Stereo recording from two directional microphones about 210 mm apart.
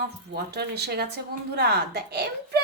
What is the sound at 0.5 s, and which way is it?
A child's voice, 50° right (ahead or behind).